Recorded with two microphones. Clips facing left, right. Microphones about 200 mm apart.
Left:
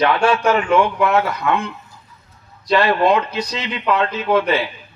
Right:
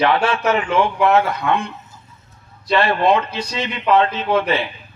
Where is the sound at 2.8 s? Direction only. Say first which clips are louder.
Even; 25° right (ahead or behind).